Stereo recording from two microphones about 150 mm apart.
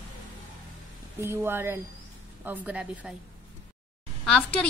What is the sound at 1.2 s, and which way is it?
Speech, 15° right (ahead or behind).